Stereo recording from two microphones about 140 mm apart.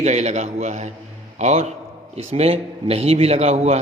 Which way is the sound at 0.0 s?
55° right (ahead or behind).